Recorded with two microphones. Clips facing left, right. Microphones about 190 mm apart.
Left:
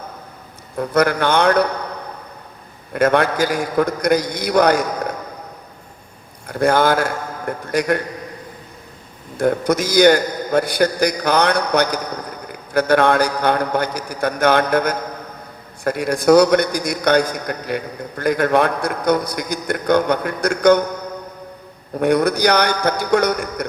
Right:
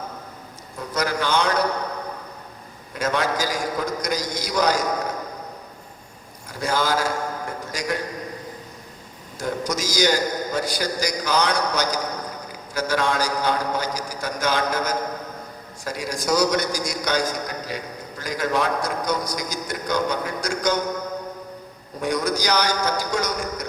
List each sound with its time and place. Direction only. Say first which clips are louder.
0.8 s a man's voice: left 8 dB; 60° left (ahead or behind)
2.9 s a man's voice: left 8 dB; 60° left (ahead or behind)
6.5 s a man's voice: left 8 dB; 60° left (ahead or behind)
9.4 s a man's voice: left 9 dB; 60° left (ahead or behind)
22.0 s a man's voice: left 8 dB; 60° left (ahead or behind)